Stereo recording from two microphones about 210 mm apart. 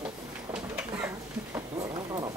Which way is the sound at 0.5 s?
5° right (ahead or behind).